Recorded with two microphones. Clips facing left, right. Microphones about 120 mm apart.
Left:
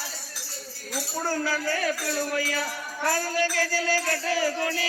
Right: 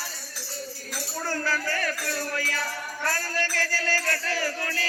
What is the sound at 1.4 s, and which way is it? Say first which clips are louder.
Music: even; 15° left (ahead or behind).